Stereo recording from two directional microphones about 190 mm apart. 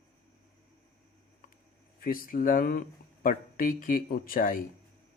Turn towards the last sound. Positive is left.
turn(degrees=45)  # may be behind; listen again after turning